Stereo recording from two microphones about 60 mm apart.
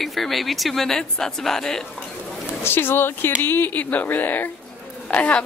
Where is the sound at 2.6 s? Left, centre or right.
Left.